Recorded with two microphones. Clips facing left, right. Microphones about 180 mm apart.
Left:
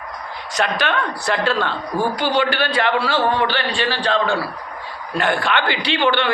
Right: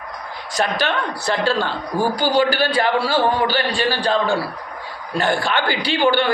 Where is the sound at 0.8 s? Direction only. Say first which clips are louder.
Even; 30° right (ahead or behind).